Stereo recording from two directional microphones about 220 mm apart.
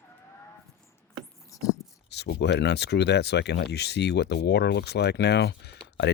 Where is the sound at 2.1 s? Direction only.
50° left (ahead or behind).